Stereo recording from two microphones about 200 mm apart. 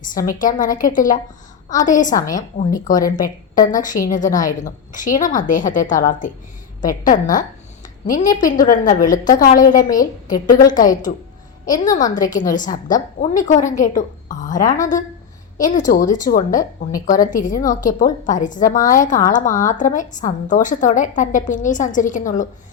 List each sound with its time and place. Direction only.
0.0 s a woman's voice: 45° left (ahead or behind)
10.8 s a woman's voice: 40° left (ahead or behind)